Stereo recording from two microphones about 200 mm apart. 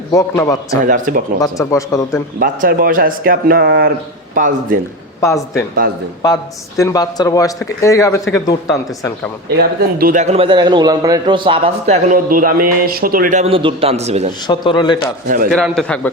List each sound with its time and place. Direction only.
0.1 s speech: 15° left (ahead or behind)
0.9 s a man's voice: 40° right (ahead or behind)
1.4 s speech: 15° left (ahead or behind)
2.4 s speech: 45° right (ahead or behind)
5.2 s speech: 15° left (ahead or behind)
9.6 s a man's voice: 45° right (ahead or behind)
13.4 s a man's voice: 25° right (ahead or behind)
14.4 s a man's voice: 20° left (ahead or behind)
15.4 s a man's voice: centre (ahead or behind)